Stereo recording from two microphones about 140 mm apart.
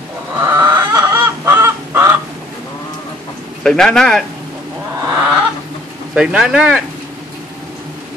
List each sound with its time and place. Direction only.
0.4 s fowl: 20° right (ahead or behind)
3.6 s speech: 5° left (ahead or behind)
5.0 s fowl: 30° right (ahead or behind)
6.1 s speech: 5° right (ahead or behind)